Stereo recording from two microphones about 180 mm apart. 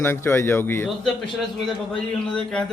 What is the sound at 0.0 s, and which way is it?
Speech, 15° left (ahead or behind).